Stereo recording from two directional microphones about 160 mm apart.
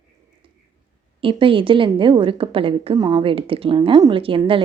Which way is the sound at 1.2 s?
35° right (ahead or behind).